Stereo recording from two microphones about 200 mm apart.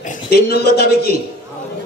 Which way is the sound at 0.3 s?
50° left (ahead or behind).